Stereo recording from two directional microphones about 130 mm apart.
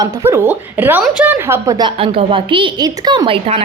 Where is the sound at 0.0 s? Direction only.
30° right (ahead or behind).